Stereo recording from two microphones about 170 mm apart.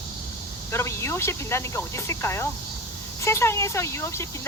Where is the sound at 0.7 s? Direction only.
15° left (ahead or behind).